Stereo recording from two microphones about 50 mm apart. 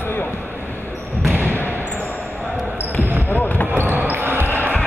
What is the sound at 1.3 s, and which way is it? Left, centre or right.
Basketball bounce, right.